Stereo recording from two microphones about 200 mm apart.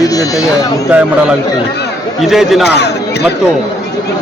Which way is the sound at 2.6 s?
55° left (ahead or behind).